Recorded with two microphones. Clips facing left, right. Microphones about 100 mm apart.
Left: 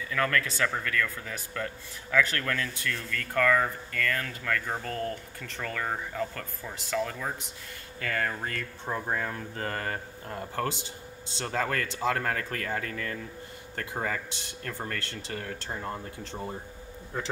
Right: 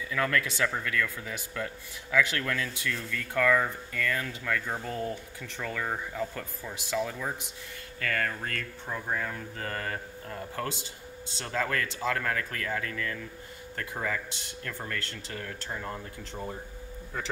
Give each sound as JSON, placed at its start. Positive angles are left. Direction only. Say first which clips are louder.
{"t": 0.1, "sound": "speech", "louder": "left 1 dB", "side_deg": -10}
{"t": 8.0, "sound": "speech", "louder": "left 1 dB", "side_deg": 15}
{"t": 9.1, "sound": "speech", "louder": "left 1 dB", "side_deg": 35}